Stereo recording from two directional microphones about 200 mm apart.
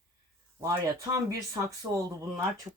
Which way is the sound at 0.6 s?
15° right (ahead or behind).